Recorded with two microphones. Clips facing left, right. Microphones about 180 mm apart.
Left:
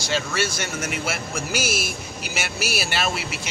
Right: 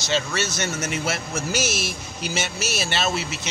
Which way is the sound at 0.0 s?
10° left (ahead or behind).